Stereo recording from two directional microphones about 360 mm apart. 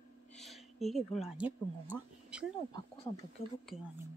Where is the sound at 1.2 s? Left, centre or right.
Centre.